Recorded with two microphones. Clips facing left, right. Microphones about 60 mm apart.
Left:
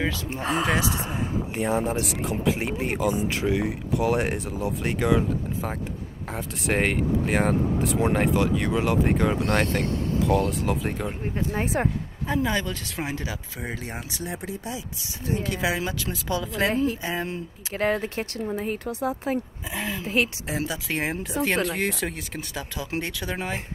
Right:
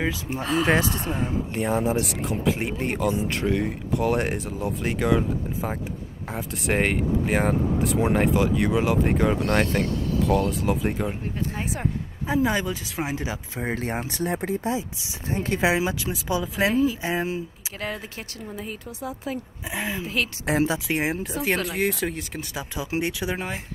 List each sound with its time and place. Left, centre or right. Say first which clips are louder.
0.4 s speech: right 1 dB; left
0.7 s speech: right 5 dB; right
1.5 s speech: right 1 dB; centre
11.5 s speech: left 4 dB; left
12.3 s speech: right 2 dB; centre
13.2 s speech: right 3 dB; right
13.7 s speech: right 7 dB; right
15.8 s speech: right 3 dB; centre
17.7 s speech: left 8 dB; left
19.7 s speech: right 2 dB; centre
20.5 s speech: right 7 dB; right
20.9 s speech: right 2 dB; centre
23.3 s speech: even; centre